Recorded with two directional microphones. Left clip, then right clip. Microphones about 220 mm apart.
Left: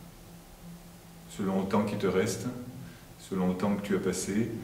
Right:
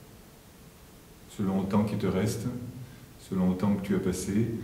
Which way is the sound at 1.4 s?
45° right (ahead or behind).